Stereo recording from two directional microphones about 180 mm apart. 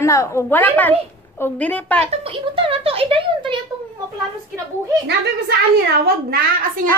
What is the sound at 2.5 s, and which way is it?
Speech, 30° right (ahead or behind).